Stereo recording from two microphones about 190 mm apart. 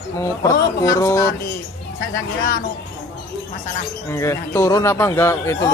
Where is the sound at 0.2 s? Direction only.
15° left (ahead or behind).